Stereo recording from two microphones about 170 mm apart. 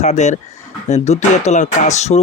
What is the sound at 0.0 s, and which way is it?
Speech, 45° left (ahead or behind).